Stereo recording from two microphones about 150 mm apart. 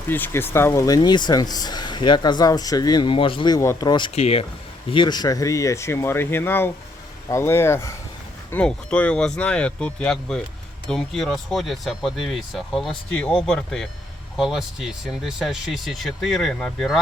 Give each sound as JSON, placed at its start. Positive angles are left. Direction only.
{"t": 0.1, "sound": "speech", "side_deg": 15}
{"t": 3.6, "sound": "speech", "side_deg": 20}
{"t": 4.1, "sound": "speech", "side_deg": 45}
{"t": 4.9, "sound": "speech", "side_deg": 30}